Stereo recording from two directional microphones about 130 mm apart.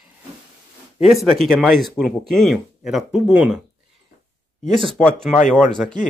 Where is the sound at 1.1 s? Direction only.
Centre (ahead or behind).